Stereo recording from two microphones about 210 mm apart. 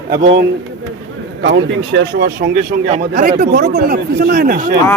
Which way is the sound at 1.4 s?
60° right (ahead or behind).